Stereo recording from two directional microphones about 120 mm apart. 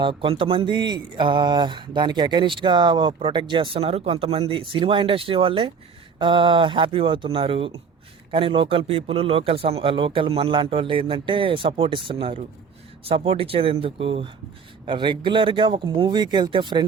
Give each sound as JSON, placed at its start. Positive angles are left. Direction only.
{"t": 0.0, "sound": "speech", "side_deg": -45}